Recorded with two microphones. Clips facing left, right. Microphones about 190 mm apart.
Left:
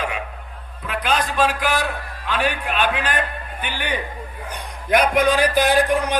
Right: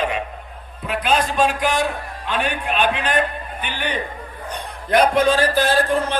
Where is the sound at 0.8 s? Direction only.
Centre (ahead or behind).